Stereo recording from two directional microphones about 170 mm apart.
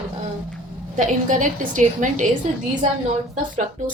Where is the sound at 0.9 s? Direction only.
50° right (ahead or behind).